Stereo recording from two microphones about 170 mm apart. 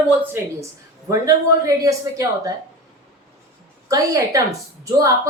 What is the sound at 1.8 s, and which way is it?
Speech, 20° right (ahead or behind).